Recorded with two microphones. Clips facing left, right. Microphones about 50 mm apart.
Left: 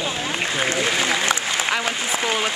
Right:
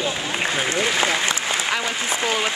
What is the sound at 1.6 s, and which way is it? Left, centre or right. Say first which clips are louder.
Applause: left 1 dB; centre.